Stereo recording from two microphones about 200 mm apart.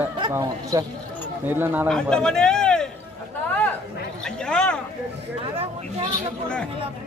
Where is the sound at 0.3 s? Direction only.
15° right (ahead or behind).